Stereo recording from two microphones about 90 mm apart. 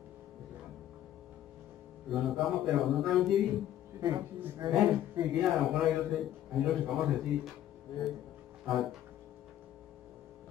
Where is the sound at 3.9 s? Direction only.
45° right (ahead or behind).